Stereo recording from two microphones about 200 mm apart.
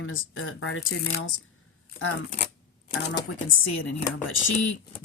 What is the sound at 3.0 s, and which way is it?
Speech, 70° left (ahead or behind).